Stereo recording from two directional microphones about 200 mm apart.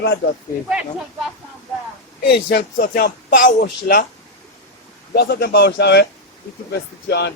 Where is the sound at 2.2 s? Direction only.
50° left (ahead or behind).